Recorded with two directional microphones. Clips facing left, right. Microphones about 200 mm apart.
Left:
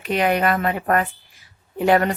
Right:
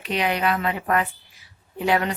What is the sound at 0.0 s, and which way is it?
A woman's voice, 50° left (ahead or behind).